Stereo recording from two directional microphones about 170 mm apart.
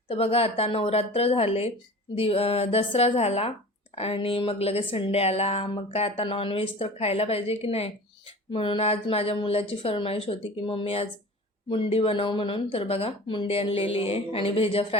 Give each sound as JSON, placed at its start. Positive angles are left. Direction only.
{"t": 0.1, "sound": "speech", "side_deg": 35}